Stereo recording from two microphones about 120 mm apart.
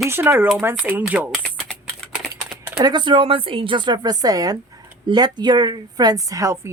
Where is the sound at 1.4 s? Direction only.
10° left (ahead or behind).